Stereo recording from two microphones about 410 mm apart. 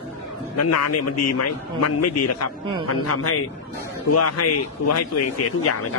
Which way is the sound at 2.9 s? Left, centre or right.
Left.